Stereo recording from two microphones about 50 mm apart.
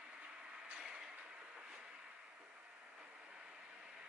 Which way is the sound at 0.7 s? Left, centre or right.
Centre.